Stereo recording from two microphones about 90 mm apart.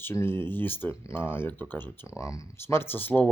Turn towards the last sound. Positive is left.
turn(degrees=20)  # may be behind; listen again after turning